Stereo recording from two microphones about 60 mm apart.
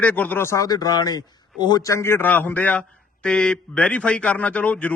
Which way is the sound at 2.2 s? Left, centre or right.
Left.